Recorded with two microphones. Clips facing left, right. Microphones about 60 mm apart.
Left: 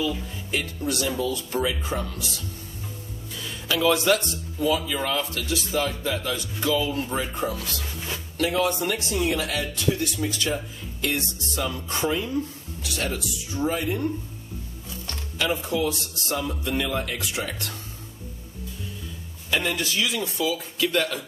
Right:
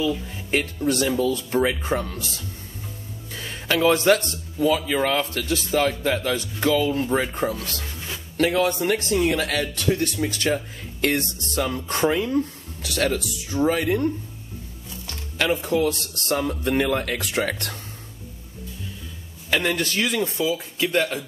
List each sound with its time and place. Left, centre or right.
0.7 s speech: right
6.9 s speech: right
15.3 s speech: right
19.5 s speech: right
20.2 s speech: right